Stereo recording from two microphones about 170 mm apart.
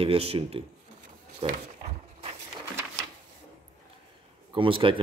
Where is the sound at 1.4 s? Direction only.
40° right (ahead or behind).